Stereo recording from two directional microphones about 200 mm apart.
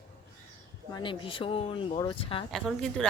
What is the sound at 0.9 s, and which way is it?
Speech, 25° left (ahead or behind).